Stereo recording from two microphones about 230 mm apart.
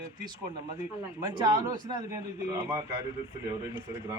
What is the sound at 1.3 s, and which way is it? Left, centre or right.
Speech, centre.